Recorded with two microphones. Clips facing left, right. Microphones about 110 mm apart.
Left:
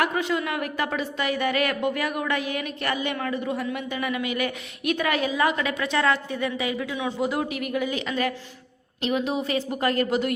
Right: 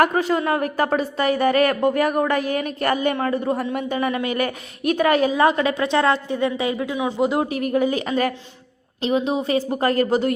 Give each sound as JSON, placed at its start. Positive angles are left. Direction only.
{"t": 0.0, "sound": "a woman's voice", "side_deg": -40}
{"t": 7.0, "sound": "a man's voice", "side_deg": -25}
{"t": 7.5, "sound": "a woman's voice", "side_deg": -40}
{"t": 9.0, "sound": "a woman's voice", "side_deg": -30}